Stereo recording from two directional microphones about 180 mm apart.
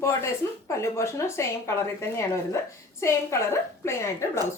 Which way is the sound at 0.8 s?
15° left (ahead or behind).